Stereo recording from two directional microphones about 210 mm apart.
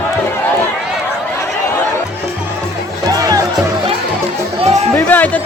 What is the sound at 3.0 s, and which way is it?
Music, 15° right (ahead or behind).